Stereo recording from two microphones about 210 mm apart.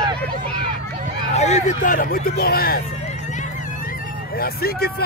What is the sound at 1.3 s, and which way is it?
Speech, 35° left (ahead or behind).